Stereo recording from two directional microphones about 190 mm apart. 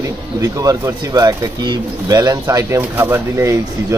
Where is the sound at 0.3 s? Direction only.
15° right (ahead or behind).